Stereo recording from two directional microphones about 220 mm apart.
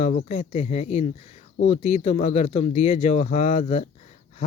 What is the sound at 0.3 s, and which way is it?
Speech, 30° left (ahead or behind).